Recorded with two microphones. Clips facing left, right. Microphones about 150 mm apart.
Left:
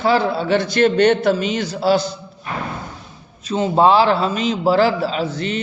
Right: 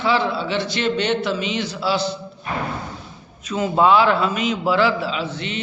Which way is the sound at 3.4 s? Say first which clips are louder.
Left 2 dB; 30° left (ahead or behind).